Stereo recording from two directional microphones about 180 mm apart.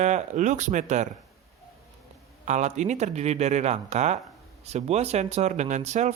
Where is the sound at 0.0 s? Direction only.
40° right (ahead or behind).